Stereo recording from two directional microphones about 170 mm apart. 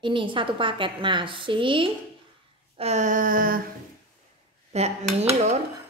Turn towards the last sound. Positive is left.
turn(degrees=-40)  # may be behind; listen again after turning